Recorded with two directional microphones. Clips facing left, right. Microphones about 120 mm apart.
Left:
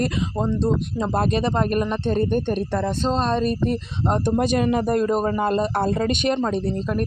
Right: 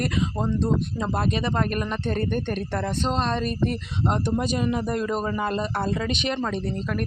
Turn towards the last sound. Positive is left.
turn(degrees=30)  # may be behind; listen again after turning